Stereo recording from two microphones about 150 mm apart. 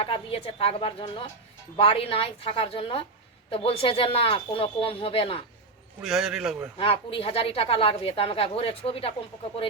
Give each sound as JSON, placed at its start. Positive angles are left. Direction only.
{"t": 0.0, "sound": "a woman's voice", "side_deg": 40}
{"t": 6.0, "sound": "a man's voice", "side_deg": 0}
{"t": 6.7, "sound": "a woman's voice", "side_deg": 40}